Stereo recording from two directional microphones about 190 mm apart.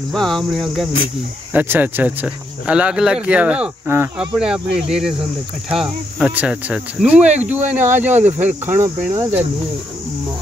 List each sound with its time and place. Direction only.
0.1 s speech: centre (ahead or behind)
1.5 s speech: 10° right (ahead or behind)